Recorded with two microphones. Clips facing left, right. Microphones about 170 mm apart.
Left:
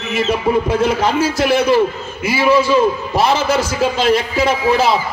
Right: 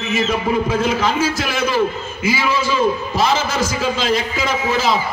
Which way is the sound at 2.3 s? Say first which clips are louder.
Left 6 dB; 60° left (ahead or behind).